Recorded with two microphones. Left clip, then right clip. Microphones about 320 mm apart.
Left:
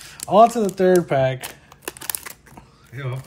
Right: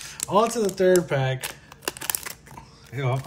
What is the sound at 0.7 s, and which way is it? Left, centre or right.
Speech, centre.